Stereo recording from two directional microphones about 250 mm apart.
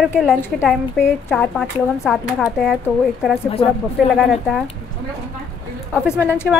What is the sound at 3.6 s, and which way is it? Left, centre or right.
Speech, left.